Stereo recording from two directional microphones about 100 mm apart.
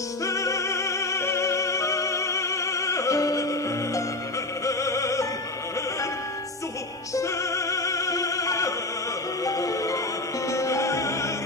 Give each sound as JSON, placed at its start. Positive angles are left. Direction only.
{"t": 0.2, "sound": "music", "side_deg": 30}
{"t": 4.6, "sound": "opera", "side_deg": 30}
{"t": 7.2, "sound": "music", "side_deg": 30}